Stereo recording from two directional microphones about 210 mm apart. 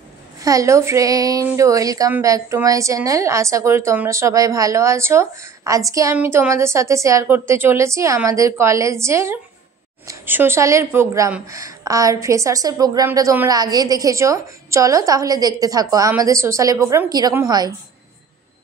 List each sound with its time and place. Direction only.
0.4 s speech: 15° right (ahead or behind)